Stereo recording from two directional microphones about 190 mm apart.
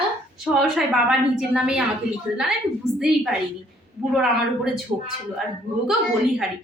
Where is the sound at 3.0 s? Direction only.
Centre (ahead or behind).